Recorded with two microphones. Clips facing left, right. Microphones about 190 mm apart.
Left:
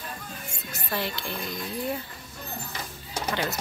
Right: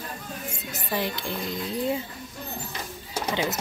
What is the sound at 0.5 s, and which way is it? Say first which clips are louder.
Speech: right 2 dB; 15° right (ahead or behind).